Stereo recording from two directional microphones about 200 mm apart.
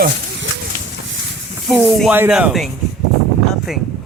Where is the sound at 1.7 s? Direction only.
Centre (ahead or behind).